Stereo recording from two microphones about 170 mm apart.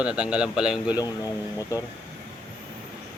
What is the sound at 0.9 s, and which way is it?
Speech, 20° left (ahead or behind).